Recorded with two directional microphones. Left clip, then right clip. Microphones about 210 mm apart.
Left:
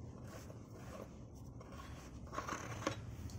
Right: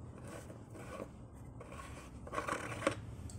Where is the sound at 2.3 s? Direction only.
30° right (ahead or behind).